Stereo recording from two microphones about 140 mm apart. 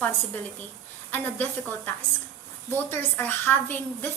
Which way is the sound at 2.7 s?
15° left (ahead or behind).